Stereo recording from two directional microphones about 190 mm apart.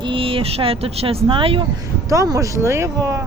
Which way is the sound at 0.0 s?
30° right (ahead or behind).